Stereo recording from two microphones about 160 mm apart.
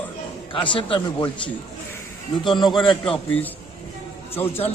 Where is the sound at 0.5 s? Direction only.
30° left (ahead or behind).